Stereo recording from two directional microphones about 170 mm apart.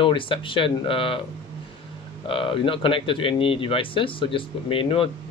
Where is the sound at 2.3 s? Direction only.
30° left (ahead or behind).